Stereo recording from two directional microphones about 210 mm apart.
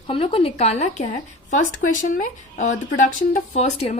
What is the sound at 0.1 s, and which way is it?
A woman's voice, 25° left (ahead or behind).